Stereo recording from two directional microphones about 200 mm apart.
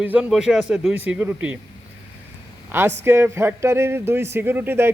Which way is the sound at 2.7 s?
10° right (ahead or behind).